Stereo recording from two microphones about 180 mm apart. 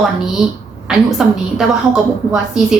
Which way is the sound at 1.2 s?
5° right (ahead or behind).